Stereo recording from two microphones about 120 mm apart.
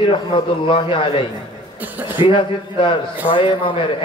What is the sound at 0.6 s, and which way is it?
Speech, 40° left (ahead or behind).